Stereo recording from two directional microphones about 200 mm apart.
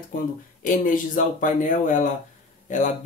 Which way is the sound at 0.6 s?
40° left (ahead or behind).